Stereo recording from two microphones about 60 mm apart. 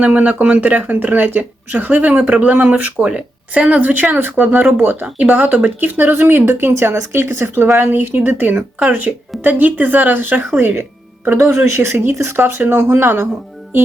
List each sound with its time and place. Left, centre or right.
0.0 s speech: right
5.0 s speech: right
11.3 s speech: right
12.4 s speech: right